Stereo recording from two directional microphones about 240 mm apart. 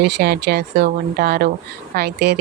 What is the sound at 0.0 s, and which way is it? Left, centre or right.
A woman's voice, right.